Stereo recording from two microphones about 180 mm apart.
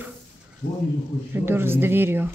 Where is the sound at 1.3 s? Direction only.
10° right (ahead or behind).